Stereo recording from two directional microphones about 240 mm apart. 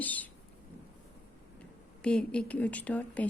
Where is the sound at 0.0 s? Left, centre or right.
Centre.